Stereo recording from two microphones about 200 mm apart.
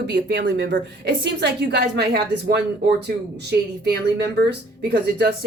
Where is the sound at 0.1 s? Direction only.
55° right (ahead or behind).